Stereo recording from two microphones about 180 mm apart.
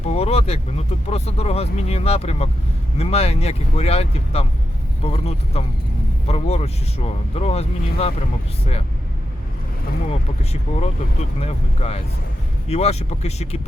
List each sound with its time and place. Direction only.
0.0 s speech: 35° left (ahead or behind)
10.1 s speech: 35° left (ahead or behind)